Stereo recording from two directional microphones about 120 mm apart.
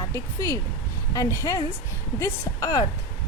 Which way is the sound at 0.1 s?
25° left (ahead or behind).